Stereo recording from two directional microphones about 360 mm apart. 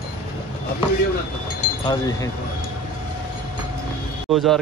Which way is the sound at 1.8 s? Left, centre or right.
Centre.